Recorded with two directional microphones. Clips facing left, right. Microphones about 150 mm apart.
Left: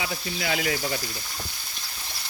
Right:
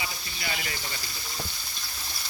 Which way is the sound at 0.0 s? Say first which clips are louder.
Left 7 dB; 90° left.